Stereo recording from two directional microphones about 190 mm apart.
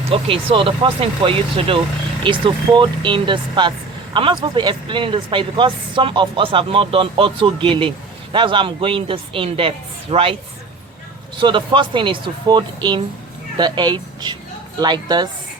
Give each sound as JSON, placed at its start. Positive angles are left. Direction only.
{"t": 0.1, "sound": "speech", "side_deg": -30}
{"t": 11.3, "sound": "speech", "side_deg": -25}